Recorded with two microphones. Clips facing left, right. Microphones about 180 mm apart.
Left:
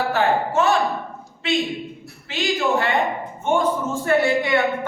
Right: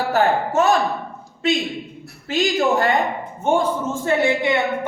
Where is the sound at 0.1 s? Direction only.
40° right (ahead or behind).